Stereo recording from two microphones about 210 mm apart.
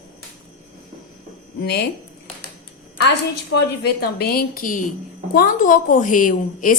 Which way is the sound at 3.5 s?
50° left (ahead or behind).